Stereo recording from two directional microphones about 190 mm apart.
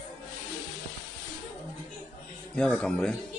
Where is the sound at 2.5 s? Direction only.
5° left (ahead or behind).